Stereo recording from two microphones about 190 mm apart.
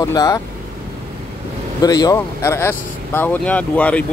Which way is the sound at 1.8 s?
20° left (ahead or behind).